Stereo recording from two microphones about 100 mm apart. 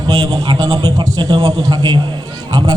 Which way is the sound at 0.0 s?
40° right (ahead or behind).